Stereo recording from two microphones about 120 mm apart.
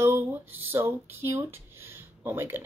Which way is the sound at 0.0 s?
20° right (ahead or behind).